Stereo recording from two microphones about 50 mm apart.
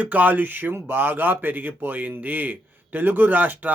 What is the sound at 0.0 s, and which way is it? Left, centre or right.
A man's voice, right.